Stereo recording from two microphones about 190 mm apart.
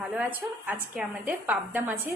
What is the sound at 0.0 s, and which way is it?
A woman's voice, 5° right (ahead or behind).